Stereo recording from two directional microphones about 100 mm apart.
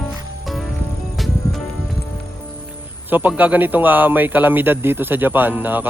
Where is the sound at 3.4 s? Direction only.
15° right (ahead or behind).